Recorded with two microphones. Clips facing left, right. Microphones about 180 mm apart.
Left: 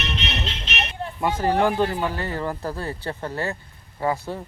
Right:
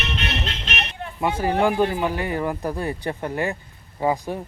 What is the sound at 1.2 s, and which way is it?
Speech, 10° right (ahead or behind).